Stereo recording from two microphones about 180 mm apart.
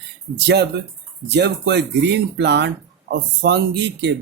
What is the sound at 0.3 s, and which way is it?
Speech, 70° right (ahead or behind).